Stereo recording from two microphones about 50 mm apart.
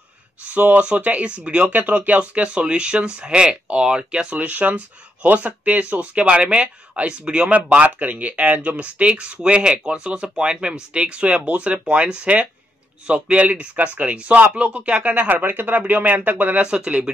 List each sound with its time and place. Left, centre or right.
0.5 s speech: right
7.5 s speech: right
16.6 s speech: right